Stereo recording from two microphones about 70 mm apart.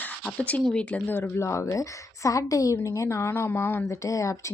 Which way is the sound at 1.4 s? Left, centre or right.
Left.